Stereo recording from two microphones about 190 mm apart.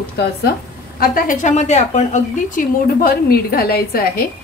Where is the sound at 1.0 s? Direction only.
45° left (ahead or behind).